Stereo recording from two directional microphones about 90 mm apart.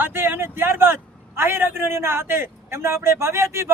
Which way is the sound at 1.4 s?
25° right (ahead or behind).